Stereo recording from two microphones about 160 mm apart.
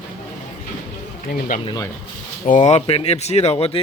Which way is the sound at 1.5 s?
55° left (ahead or behind).